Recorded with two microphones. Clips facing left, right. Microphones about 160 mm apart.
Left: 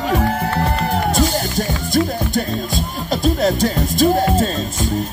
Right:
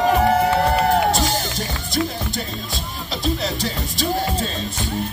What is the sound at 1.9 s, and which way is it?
Music, 50° left (ahead or behind).